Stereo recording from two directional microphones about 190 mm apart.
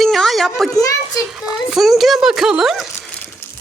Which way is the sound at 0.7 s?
20° left (ahead or behind).